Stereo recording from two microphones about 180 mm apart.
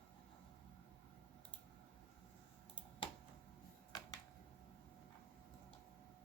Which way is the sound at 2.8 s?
25° left (ahead or behind).